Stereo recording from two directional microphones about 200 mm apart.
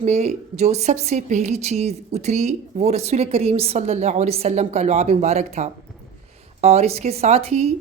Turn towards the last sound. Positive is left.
turn(degrees=-30)  # may be behind; listen again after turning